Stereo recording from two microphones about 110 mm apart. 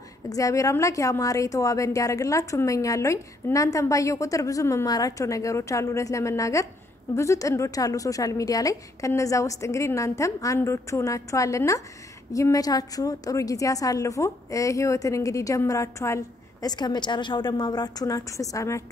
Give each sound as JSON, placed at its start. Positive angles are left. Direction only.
{"t": 0.3, "sound": "a woman's voice", "side_deg": 30}
{"t": 16.6, "sound": "a woman's voice", "side_deg": 40}